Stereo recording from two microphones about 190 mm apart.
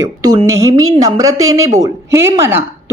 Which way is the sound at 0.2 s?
20° right (ahead or behind).